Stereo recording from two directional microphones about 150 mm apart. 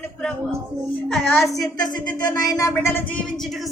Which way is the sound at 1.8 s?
25° left (ahead or behind).